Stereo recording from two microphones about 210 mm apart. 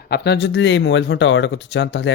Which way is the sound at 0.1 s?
55° left (ahead or behind).